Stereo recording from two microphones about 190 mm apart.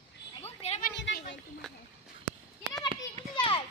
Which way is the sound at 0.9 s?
65° left (ahead or behind).